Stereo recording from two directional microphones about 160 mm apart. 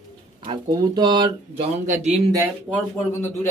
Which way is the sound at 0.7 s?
25° right (ahead or behind).